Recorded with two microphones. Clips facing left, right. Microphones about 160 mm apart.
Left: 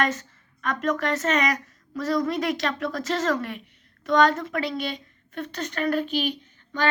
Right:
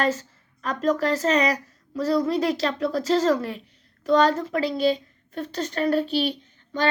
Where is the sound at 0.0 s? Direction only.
30° right (ahead or behind).